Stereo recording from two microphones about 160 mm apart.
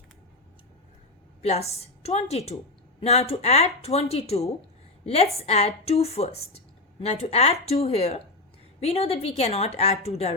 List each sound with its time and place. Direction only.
1.4 s a woman's voice: 40° left (ahead or behind)